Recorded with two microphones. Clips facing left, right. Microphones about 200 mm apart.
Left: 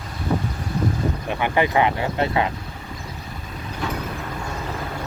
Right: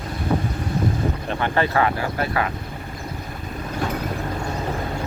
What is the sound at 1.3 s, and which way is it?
Speech, 15° left (ahead or behind).